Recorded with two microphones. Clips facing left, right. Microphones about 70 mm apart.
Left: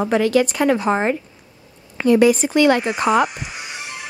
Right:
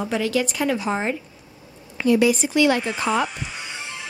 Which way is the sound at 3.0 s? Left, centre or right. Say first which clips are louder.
Left 5 dB; left.